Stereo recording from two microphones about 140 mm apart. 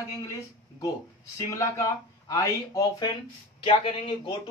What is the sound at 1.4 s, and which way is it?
Speech, 20° left (ahead or behind).